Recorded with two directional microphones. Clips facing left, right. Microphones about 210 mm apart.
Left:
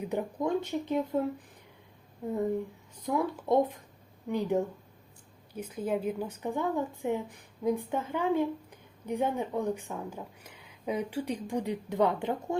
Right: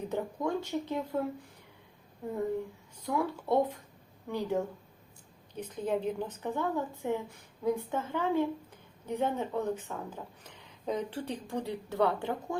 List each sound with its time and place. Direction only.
0.0 s speech: 15° left (ahead or behind)
3.0 s a woman's voice: 20° left (ahead or behind)